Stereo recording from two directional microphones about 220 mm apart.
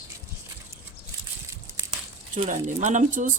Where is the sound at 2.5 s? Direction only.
35° right (ahead or behind).